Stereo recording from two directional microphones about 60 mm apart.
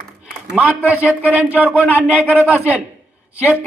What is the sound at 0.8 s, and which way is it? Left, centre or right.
Speech, right.